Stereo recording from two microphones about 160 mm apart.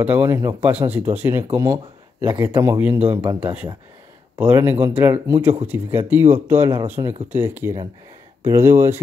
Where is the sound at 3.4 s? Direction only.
10° right (ahead or behind).